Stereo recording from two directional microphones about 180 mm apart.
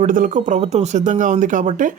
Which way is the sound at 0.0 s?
45° right (ahead or behind).